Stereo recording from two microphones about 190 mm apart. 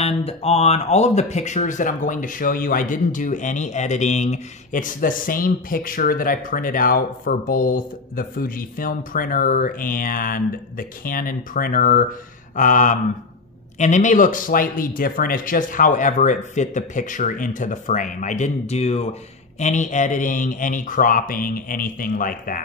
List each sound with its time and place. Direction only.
0.0 s speech: 30° left (ahead or behind)